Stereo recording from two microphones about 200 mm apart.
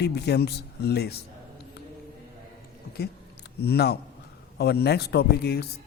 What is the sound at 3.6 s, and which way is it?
Speech, 55° left (ahead or behind).